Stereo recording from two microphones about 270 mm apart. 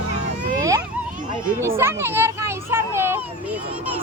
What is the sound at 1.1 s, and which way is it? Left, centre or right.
Speech, right.